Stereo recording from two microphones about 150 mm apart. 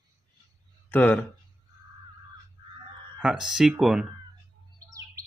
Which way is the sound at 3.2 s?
5° right (ahead or behind).